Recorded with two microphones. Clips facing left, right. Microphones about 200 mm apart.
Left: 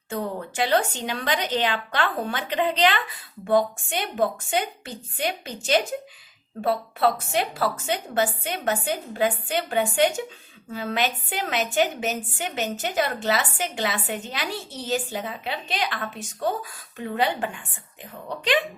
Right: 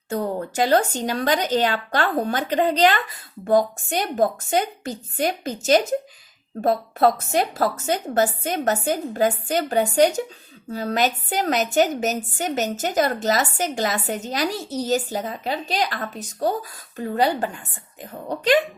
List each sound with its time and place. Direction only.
0.1 s a woman's voice: 40° right (ahead or behind)